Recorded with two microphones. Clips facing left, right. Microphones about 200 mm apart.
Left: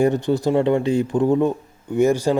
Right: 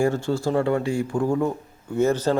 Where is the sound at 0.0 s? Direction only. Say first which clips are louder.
Left 4 dB; 20° left (ahead or behind).